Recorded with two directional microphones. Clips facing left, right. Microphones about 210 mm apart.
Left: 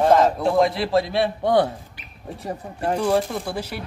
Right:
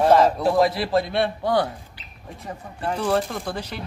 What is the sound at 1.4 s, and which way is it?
Speech, 25° left (ahead or behind).